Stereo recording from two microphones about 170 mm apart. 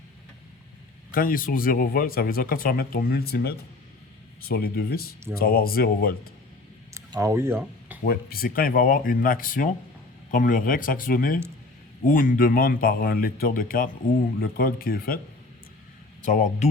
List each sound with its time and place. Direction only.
1.1 s speech: 55° left (ahead or behind)
6.9 s speech: 15° right (ahead or behind)
8.0 s speech: 60° left (ahead or behind)
16.2 s speech: 45° left (ahead or behind)